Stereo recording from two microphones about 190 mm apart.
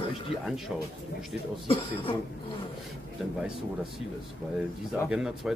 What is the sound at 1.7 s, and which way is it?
Speech, 25° left (ahead or behind).